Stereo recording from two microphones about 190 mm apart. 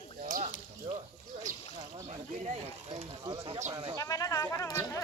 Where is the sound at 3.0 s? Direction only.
30° right (ahead or behind).